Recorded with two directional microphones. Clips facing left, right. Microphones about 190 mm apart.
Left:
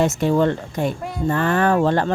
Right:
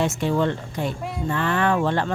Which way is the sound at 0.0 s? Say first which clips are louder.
Left 4 dB; 45° left (ahead or behind).